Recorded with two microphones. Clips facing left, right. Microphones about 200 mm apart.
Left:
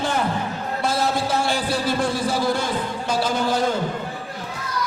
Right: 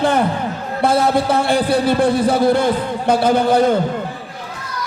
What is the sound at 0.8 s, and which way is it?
A man's voice, 55° right (ahead or behind).